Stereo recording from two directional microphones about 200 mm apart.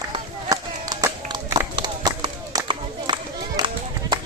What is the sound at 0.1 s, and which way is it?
Run, 20° right (ahead or behind).